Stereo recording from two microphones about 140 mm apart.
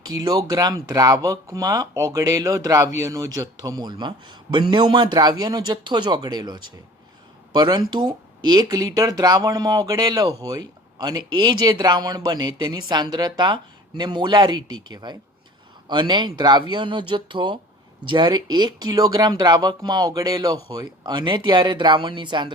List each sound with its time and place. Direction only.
0.0 s speech: 30° right (ahead or behind)